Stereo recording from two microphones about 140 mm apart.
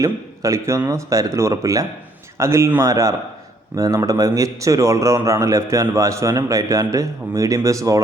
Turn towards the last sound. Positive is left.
turn(degrees=-25)  # may be behind; listen again after turning